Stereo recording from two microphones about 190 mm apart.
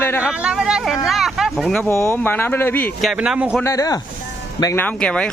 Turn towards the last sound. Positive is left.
turn(degrees=5)  # may be behind; listen again after turning